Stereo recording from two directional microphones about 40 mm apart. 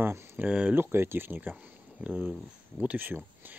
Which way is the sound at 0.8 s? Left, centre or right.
Right.